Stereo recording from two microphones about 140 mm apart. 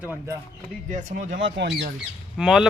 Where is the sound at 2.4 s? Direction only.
5° right (ahead or behind).